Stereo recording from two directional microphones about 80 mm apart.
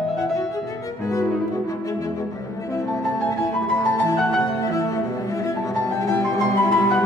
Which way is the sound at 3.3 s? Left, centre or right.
Left.